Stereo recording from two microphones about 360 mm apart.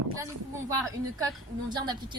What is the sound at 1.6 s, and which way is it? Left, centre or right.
Speech, centre.